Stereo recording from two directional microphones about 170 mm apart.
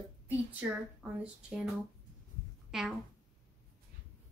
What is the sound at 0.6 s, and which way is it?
Speech, 10° right (ahead or behind).